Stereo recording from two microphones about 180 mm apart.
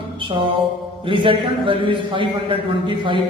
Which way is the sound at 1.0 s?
30° right (ahead or behind).